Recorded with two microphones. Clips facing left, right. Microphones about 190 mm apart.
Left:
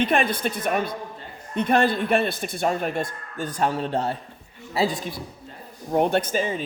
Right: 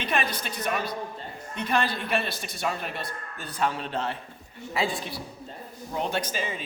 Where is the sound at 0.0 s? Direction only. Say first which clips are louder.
Left 7 dB; 50° left (ahead or behind).